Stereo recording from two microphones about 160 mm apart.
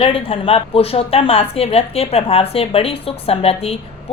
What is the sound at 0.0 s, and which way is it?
A woman's voice, 35° left (ahead or behind).